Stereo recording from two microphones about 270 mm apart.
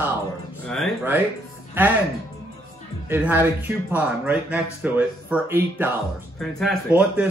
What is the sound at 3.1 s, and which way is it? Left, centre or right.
A man's voice, centre.